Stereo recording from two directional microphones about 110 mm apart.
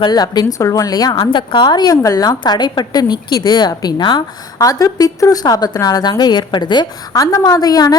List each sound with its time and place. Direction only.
0.0 s a woman's voice: 40° left (ahead or behind)